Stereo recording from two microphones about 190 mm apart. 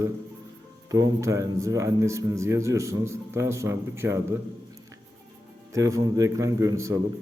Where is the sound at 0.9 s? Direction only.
15° right (ahead or behind).